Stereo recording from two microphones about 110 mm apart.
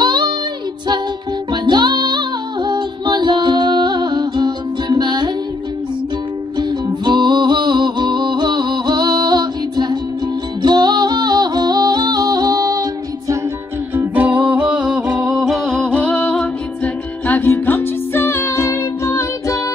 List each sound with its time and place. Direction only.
0.0 s child singing: 45° right (ahead or behind)
1.5 s music: 45° right (ahead or behind)
6.5 s music: 40° right (ahead or behind)
13.9 s music: 15° right (ahead or behind); by 19.6 s 30° left (ahead or behind)